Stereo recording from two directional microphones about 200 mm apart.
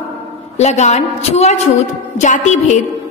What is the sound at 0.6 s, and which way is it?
A woman's voice, 35° left (ahead or behind).